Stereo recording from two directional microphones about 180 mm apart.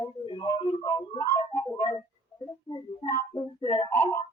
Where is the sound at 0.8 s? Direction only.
20° left (ahead or behind).